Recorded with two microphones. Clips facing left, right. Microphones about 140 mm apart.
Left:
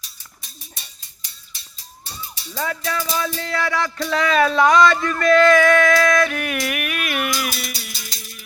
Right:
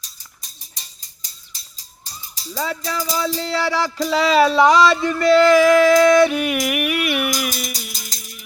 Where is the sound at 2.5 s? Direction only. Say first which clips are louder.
Even; 10° right (ahead or behind).